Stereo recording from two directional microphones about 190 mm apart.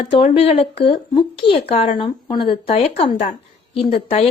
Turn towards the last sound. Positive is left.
turn(degrees=30)  # may be behind; listen again after turning